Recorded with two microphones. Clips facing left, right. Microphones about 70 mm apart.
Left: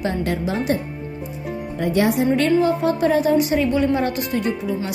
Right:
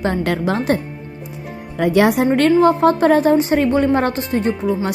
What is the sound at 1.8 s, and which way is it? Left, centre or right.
Speech, right.